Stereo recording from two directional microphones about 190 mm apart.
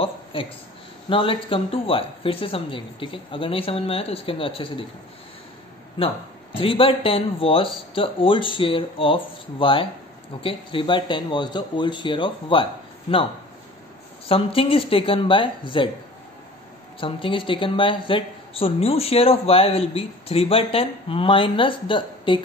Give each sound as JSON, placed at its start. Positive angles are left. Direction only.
{"t": 0.0, "sound": "a sound", "side_deg": 25}
{"t": 1.0, "sound": "a man's voice", "side_deg": 25}
{"t": 5.9, "sound": "a man's voice", "side_deg": 30}
{"t": 14.2, "sound": "a man's voice", "side_deg": 30}
{"t": 17.0, "sound": "a man's voice", "side_deg": 25}